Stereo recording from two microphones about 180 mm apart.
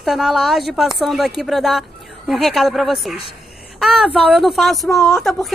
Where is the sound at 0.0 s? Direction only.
Centre (ahead or behind).